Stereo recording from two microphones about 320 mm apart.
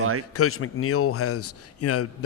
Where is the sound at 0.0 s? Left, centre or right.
Right.